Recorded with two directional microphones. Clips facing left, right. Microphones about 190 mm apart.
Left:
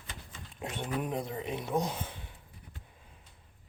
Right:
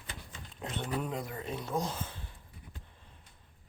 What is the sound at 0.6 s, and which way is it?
Speech, 10° left (ahead or behind).